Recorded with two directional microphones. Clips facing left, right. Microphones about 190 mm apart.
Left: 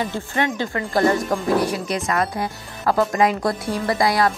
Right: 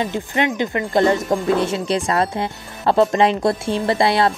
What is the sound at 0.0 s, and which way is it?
Speech, 20° right (ahead or behind).